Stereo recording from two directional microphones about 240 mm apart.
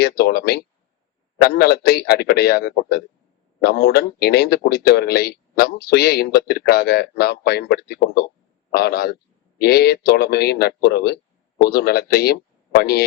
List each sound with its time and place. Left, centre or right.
0.0 s a man's voice: left